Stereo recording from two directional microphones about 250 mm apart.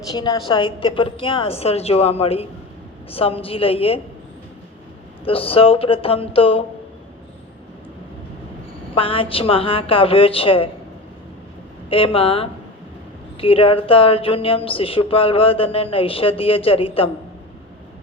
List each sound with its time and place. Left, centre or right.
0.1 s speech: centre
5.2 s speech: left
9.0 s speech: left
11.9 s speech: left